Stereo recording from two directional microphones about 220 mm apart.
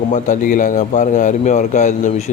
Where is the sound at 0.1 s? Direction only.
35° left (ahead or behind).